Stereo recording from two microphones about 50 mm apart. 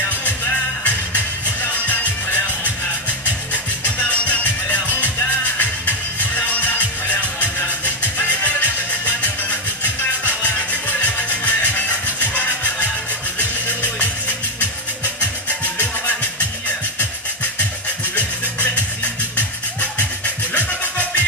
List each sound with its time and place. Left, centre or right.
0.8 s music: left
19.3 s music: left